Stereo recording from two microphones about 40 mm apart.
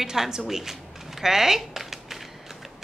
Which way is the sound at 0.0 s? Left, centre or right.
Centre.